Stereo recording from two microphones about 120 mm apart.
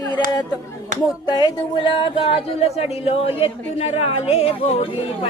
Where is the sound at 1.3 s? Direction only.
35° left (ahead or behind); by 5.3 s 50° left (ahead or behind).